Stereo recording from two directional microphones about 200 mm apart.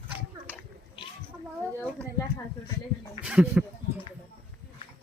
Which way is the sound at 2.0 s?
15° left (ahead or behind).